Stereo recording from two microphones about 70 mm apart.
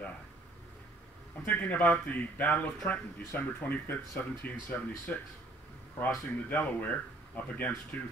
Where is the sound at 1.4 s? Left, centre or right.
Left.